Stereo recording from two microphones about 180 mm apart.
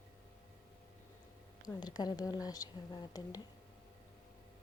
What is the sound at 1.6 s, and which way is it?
Speech, 25° left (ahead or behind).